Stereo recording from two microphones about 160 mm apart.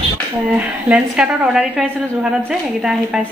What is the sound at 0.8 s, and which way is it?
Speech, 5° right (ahead or behind).